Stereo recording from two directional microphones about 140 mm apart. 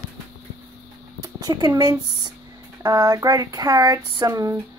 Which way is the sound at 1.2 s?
30° right (ahead or behind).